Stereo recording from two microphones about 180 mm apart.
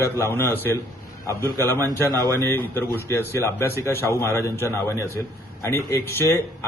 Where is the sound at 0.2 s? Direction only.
10° left (ahead or behind).